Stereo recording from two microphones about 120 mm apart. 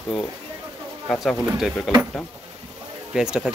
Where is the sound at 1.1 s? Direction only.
Centre (ahead or behind).